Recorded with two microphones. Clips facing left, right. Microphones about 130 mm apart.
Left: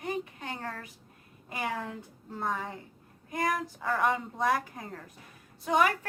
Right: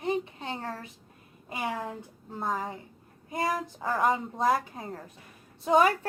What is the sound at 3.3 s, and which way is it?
A woman's voice, 25° right (ahead or behind).